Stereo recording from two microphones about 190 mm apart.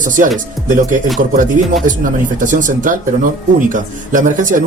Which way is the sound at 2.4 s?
45° right (ahead or behind).